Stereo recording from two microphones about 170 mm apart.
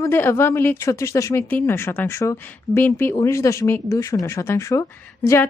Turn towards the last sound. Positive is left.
turn(degrees=15)  # may be behind; listen again after turning